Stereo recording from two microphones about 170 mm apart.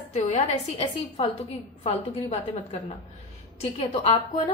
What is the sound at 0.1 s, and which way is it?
A woman's voice, 40° left (ahead or behind).